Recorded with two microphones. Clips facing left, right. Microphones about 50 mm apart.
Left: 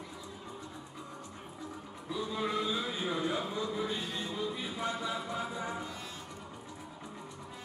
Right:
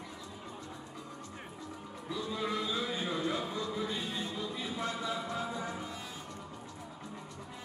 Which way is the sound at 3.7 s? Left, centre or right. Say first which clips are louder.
Left 1 dB; centre.